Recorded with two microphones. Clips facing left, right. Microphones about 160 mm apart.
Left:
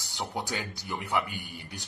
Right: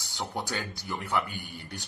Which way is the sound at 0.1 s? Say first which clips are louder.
Even; 15° left (ahead or behind).